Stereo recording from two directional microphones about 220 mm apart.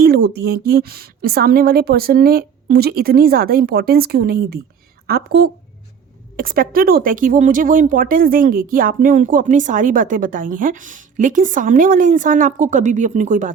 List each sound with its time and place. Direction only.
0.0 s a woman's voice: 45° right (ahead or behind)